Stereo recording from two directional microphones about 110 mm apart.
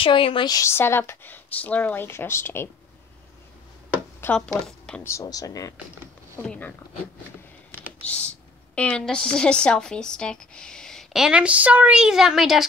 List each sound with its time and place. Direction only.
0.0 s a woman's voice: 55° left (ahead or behind)
0.5 s speech: 25° left (ahead or behind)
4.3 s speech: 5° left (ahead or behind)
5.0 s speech: 30° left (ahead or behind)
6.4 s speech: 10° left (ahead or behind)
8.0 s a woman's voice: 10° left (ahead or behind)
11.2 s a woman's voice: 10° right (ahead or behind)